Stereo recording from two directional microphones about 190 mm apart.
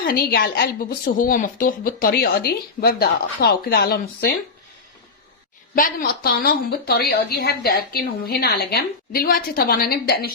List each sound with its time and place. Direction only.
0.0 s a woman's voice: 50° left (ahead or behind)
5.7 s a woman's voice: 45° left (ahead or behind)